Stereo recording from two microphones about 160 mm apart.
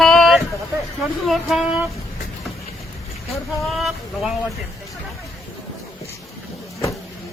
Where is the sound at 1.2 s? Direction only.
Centre (ahead or behind).